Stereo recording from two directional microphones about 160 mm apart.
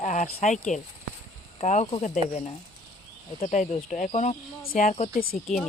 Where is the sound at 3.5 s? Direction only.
50° left (ahead or behind).